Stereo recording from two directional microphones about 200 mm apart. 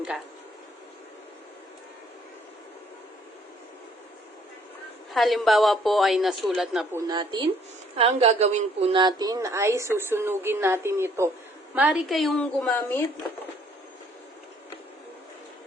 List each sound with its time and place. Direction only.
5.1 s a woman's voice: centre (ahead or behind)
6.9 s a woman's voice: 20° right (ahead or behind); by 13.0 s 5° left (ahead or behind)